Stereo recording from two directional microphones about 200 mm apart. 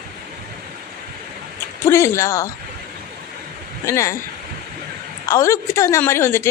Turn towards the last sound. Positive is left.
turn(degrees=15)  # may be behind; listen again after turning